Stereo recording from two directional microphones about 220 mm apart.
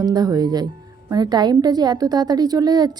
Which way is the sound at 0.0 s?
15° right (ahead or behind).